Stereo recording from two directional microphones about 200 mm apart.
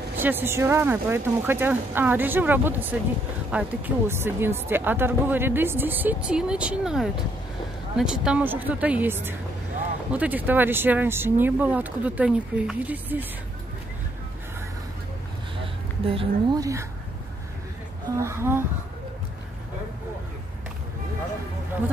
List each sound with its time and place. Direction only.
0.2 s speech: 10° right (ahead or behind)
15.6 s speech: 25° right (ahead or behind)
18.1 s speech: 15° right (ahead or behind)